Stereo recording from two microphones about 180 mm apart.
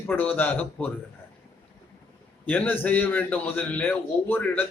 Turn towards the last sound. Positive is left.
turn(degrees=10)  # may be behind; listen again after turning